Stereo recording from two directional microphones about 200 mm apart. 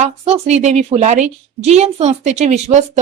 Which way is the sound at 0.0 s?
35° right (ahead or behind).